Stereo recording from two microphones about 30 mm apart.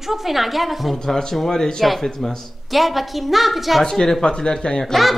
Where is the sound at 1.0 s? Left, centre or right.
Centre.